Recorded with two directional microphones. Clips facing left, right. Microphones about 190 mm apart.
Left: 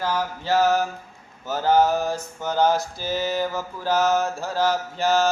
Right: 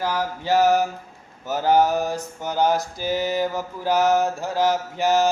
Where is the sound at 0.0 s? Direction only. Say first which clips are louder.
Right 1 dB; 15° right (ahead or behind).